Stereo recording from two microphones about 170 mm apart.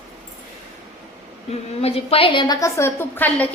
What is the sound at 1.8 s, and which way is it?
A woman's voice, 35° left (ahead or behind).